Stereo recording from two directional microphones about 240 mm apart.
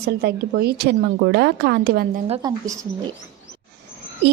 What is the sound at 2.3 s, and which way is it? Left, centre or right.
Speech, centre.